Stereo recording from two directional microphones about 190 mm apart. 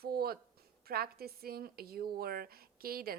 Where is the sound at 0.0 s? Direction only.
55° right (ahead or behind).